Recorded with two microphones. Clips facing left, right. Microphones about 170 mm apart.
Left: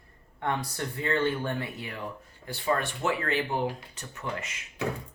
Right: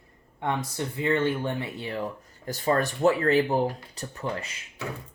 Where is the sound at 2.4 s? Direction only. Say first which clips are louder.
Right 4 dB; 40° right (ahead or behind).